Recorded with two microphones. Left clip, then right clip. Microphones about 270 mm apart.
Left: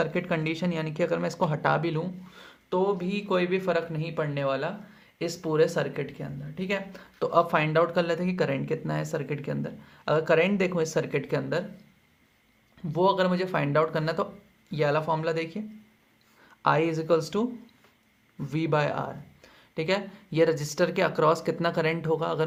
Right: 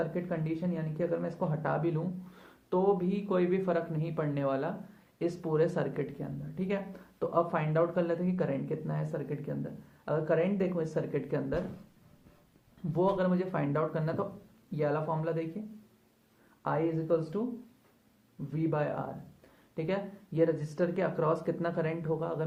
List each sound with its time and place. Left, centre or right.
0.0 s speech: left
12.9 s speech: left
16.6 s speech: left
18.5 s speech: left